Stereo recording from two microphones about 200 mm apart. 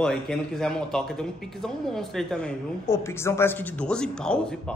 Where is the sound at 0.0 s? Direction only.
5° left (ahead or behind).